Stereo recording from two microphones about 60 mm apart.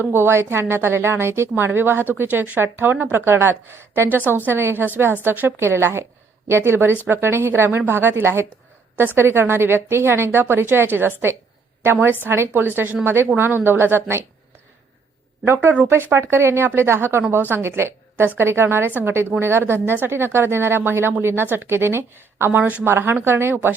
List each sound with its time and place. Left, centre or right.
0.0 s speech: right
5.5 s speech: right
15.4 s a woman's voice: right